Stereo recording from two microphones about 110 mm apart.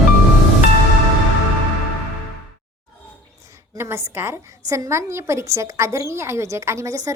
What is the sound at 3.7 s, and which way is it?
A woman's voice, 25° right (ahead or behind).